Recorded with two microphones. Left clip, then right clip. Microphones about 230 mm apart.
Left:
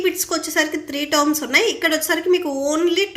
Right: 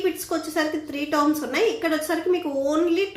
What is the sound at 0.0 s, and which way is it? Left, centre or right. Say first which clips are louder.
A woman's voice: left 4 dB; left.